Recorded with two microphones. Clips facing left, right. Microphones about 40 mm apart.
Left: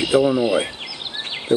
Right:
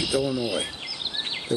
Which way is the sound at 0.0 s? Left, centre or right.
Left.